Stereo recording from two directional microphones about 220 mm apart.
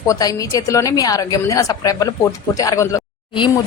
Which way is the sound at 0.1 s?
15° left (ahead or behind).